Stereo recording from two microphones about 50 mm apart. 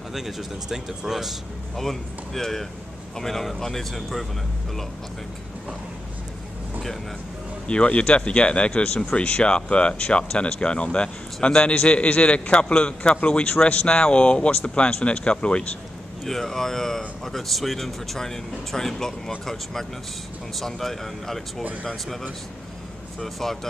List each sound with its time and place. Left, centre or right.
0.1 s speech: centre
1.8 s speech: centre
7.6 s speech: left
16.3 s speech: centre